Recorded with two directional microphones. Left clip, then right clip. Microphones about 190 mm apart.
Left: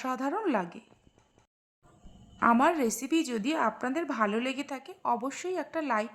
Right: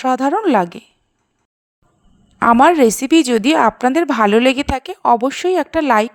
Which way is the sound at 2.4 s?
45° right (ahead or behind).